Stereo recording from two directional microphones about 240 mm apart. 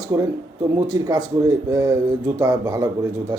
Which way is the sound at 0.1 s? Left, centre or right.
Centre.